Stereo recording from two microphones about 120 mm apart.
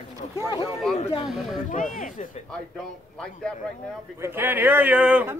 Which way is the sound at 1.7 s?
90° left.